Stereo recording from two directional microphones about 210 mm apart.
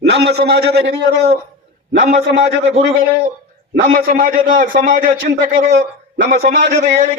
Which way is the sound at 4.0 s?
40° right (ahead or behind).